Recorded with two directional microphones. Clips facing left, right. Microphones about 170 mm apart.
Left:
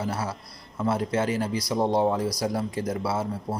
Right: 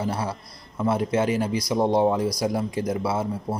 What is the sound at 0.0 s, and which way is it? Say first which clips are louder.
Speech: right 2 dB; 15° right (ahead or behind).